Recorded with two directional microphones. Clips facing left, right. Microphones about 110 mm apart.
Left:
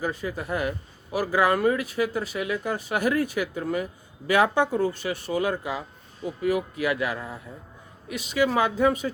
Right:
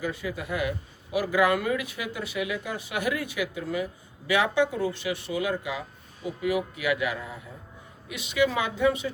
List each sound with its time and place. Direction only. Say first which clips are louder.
0.0 s speech: left 2 dB; 40° left (ahead or behind)